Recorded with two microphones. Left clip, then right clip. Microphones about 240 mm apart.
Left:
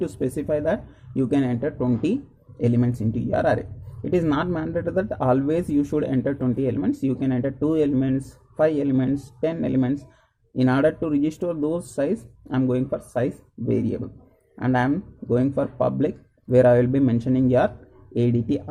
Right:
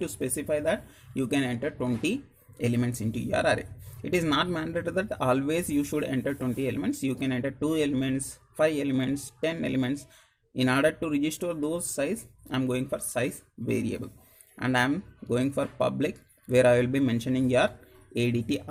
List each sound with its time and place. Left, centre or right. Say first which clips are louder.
0.0 s speech: left 6 dB; right